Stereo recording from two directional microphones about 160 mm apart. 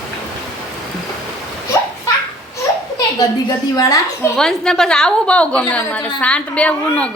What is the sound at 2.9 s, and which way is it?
A woman's voice, 25° left (ahead or behind).